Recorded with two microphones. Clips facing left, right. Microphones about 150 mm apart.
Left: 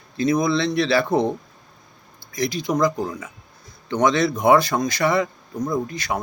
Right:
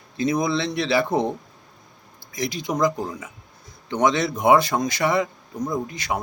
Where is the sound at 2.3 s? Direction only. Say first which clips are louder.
Left 3 dB; 20° right (ahead or behind).